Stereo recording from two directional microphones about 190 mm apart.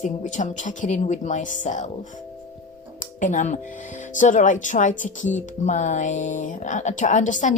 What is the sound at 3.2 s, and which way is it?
Music, 40° left (ahead or behind).